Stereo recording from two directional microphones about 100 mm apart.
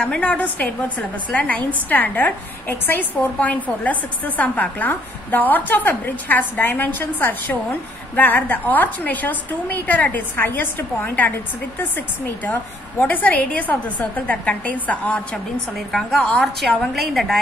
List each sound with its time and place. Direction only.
0.0 s a woman's voice: 10° left (ahead or behind)
13.0 s a woman's voice: 15° left (ahead or behind)
15.9 s a woman's voice: 5° left (ahead or behind)